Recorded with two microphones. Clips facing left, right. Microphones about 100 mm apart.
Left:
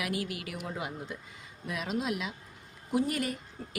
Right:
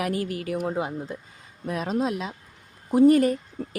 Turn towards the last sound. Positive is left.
turn(degrees=-40)  # may be behind; listen again after turning